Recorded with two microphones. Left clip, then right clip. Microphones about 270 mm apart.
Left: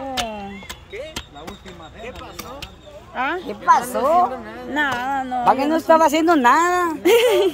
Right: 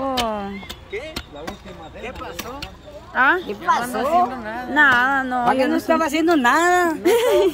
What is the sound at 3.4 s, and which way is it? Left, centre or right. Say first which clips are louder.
Speech: left 4 dB; left.